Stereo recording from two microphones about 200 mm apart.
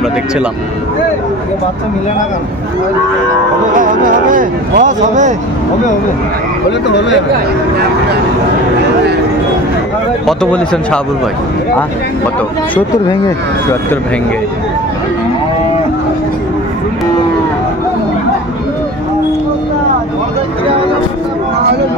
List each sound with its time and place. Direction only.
3.8 s speech: 40° right (ahead or behind)
10.2 s speech: 5° left (ahead or behind)